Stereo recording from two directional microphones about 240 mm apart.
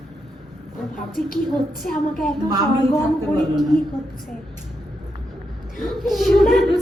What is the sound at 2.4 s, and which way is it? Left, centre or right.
Speech, centre.